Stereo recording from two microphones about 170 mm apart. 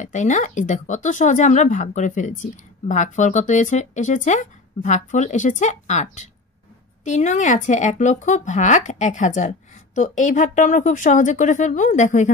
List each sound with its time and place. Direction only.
0.0 s speech: 45° left (ahead or behind)